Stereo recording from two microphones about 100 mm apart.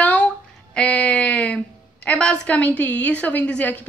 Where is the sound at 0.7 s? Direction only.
10° left (ahead or behind).